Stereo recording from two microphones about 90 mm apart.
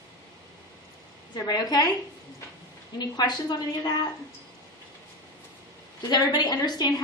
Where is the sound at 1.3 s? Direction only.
50° left (ahead or behind).